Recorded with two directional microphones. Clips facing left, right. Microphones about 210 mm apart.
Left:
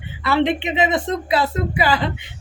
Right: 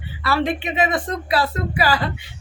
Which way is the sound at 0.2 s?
20° left (ahead or behind).